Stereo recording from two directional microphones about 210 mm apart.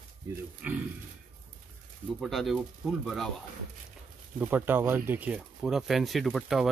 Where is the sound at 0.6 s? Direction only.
5° right (ahead or behind).